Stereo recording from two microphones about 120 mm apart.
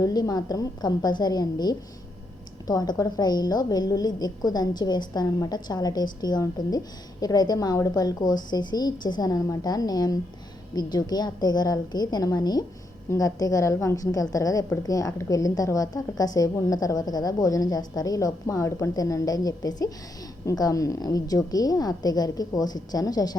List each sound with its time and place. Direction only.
0.0 s a woman's voice: 30° left (ahead or behind)